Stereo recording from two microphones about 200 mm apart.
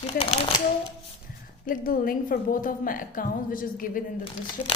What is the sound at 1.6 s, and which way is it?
Speech, 45° left (ahead or behind).